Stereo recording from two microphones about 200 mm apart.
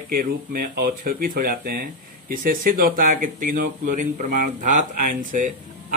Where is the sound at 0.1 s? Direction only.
45° right (ahead or behind).